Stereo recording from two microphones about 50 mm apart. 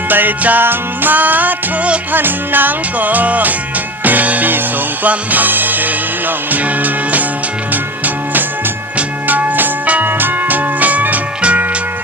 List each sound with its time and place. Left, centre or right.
0.1 s music: right